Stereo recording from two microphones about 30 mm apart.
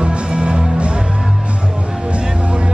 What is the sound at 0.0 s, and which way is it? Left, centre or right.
Music, right.